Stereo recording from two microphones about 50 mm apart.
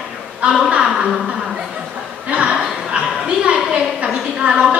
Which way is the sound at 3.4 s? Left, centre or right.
Centre.